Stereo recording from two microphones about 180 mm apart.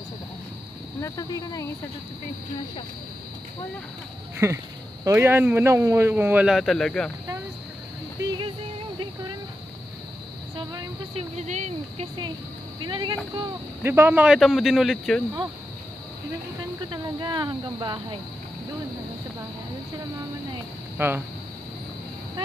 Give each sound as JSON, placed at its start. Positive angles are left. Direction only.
{"t": 1.0, "sound": "speech", "side_deg": 20}
{"t": 4.4, "sound": "speech", "side_deg": -15}
{"t": 10.5, "sound": "a sound", "side_deg": -25}
{"t": 11.1, "sound": "speech", "side_deg": -40}
{"t": 12.8, "sound": "speech", "side_deg": -25}
{"t": 13.8, "sound": "a man's voice", "side_deg": -10}
{"t": 16.9, "sound": "speech", "side_deg": -25}
{"t": 21.0, "sound": "speech", "side_deg": -10}